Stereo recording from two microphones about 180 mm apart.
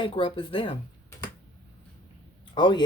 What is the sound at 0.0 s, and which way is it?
Speech, 25° left (ahead or behind).